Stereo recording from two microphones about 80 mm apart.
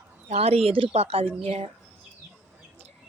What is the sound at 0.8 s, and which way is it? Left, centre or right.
Speech, right.